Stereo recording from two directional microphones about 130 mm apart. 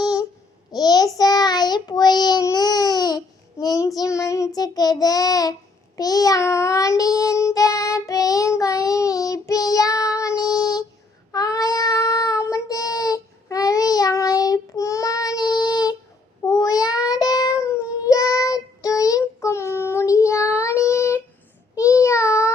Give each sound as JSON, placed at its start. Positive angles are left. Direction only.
{"t": 0.7, "sound": "child singing", "side_deg": 30}